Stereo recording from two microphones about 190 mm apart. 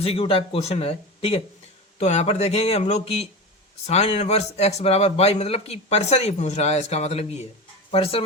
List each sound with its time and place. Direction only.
0.0 s a man's voice: 30° left (ahead or behind)